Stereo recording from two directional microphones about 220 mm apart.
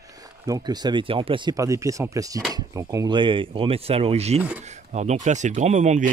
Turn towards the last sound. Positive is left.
turn(degrees=-35)  # may be behind; listen again after turning